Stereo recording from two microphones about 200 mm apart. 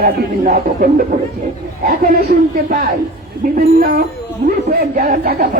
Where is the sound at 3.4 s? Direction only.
45° right (ahead or behind).